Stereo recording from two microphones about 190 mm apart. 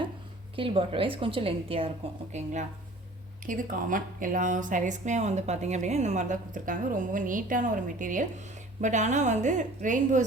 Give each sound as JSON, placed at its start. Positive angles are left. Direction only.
{"t": 0.5, "sound": "a woman's voice", "side_deg": -30}